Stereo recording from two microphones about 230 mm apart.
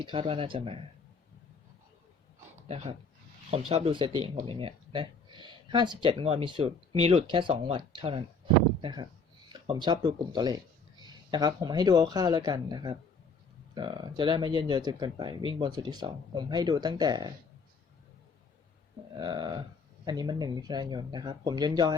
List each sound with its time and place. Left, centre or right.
0.0 s speech: right
2.6 s speech: right
19.1 s speech: centre